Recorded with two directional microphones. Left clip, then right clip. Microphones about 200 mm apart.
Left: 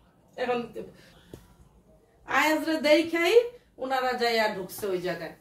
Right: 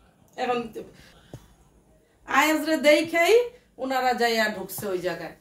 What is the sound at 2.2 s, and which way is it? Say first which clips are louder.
A woman's voice: right 3 dB; 50° right (ahead or behind).